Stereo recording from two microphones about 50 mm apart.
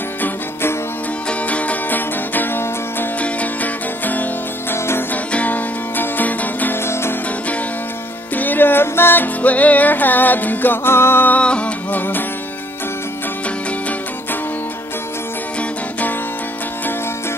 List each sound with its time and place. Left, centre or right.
0.2 s music: left
1.5 s music: left
3.2 s music: left
6.8 s music: left
8.4 s music: left
11.3 s music: left